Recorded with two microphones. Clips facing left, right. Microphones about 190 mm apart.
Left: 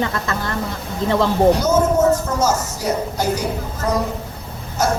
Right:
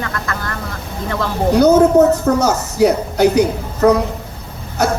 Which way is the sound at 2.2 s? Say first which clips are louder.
Right 4 dB; 65° right (ahead or behind).